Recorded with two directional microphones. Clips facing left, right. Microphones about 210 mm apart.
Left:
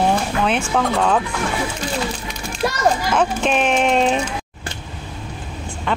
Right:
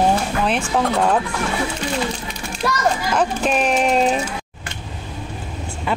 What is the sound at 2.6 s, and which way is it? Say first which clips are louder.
Speech: left 1 dB; 25° left (ahead or behind).